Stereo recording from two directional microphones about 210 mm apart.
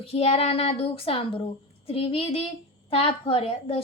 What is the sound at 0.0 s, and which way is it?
Speech, 30° left (ahead or behind).